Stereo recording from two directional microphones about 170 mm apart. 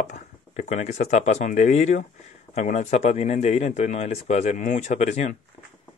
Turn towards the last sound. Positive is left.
turn(degrees=40)  # may be behind; listen again after turning